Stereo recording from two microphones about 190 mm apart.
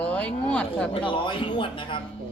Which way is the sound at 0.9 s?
25° left (ahead or behind).